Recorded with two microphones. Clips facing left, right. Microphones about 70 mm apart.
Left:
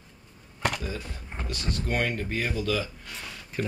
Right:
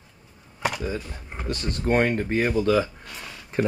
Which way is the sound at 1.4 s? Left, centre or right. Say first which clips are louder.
Right 7 dB; right.